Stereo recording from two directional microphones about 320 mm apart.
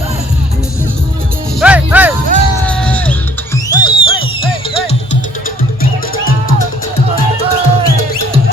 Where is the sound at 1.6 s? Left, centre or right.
Centre.